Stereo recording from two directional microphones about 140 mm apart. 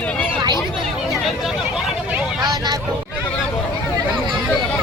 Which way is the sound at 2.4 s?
30° right (ahead or behind).